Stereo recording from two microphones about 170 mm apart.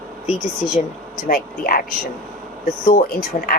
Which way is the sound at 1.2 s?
60° left (ahead or behind).